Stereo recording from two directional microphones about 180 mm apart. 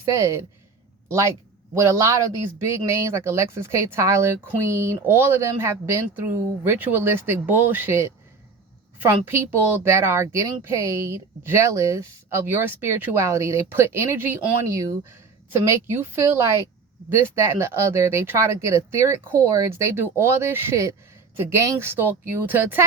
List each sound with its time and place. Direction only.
0.0 s a woman's voice: 15° right (ahead or behind)